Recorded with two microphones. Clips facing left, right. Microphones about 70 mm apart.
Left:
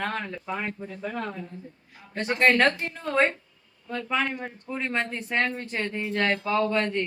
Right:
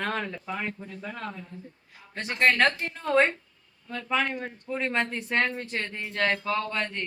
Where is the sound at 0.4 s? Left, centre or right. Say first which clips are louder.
Left 2 dB; centre.